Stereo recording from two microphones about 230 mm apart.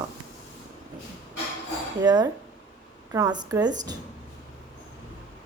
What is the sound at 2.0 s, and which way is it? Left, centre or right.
Speech, centre.